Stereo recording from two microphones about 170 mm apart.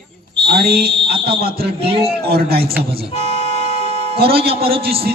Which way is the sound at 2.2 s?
65° right (ahead or behind).